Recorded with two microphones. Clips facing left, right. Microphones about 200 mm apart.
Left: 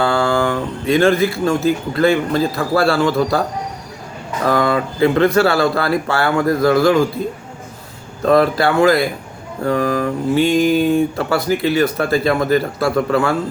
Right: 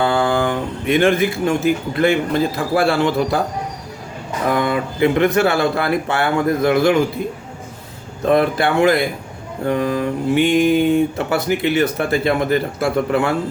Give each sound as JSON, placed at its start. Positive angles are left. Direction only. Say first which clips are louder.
{"t": 0.0, "sound": "speech", "louder": "left 1 dB", "side_deg": -20}
{"t": 4.4, "sound": "speech", "louder": "left 2 dB", "side_deg": -20}
{"t": 8.2, "sound": "speech", "louder": "left 2 dB", "side_deg": -20}